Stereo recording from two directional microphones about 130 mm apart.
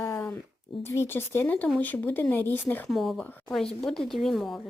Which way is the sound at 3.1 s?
10° left (ahead or behind).